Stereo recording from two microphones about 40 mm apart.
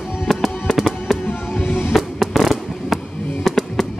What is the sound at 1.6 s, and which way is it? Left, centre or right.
Music, left.